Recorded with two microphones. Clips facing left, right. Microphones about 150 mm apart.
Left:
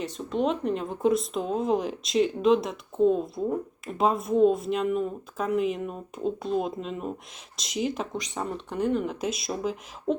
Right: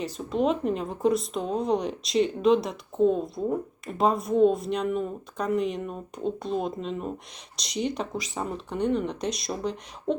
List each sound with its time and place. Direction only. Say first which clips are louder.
0.0 s speech: right 1 dB; centre (ahead or behind)